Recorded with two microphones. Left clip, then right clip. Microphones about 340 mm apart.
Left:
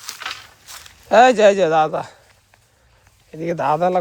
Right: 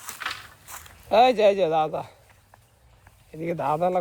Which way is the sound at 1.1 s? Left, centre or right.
Left.